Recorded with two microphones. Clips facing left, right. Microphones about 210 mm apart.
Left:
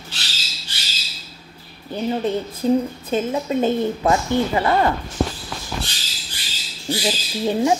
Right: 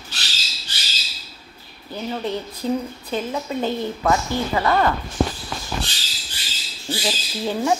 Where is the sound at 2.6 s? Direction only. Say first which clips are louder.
Left 6 dB; 20° left (ahead or behind).